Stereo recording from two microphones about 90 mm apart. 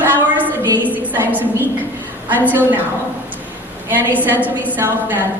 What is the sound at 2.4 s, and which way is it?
Speech, 20° right (ahead or behind).